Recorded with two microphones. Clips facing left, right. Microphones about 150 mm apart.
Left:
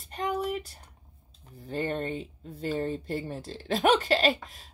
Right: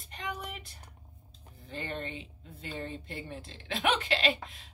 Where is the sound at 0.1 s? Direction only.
45° left (ahead or behind).